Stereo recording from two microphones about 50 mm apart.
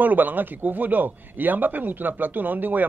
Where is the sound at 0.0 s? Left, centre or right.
Right.